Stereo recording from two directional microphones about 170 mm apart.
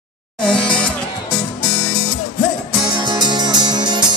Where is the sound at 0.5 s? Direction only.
5° left (ahead or behind).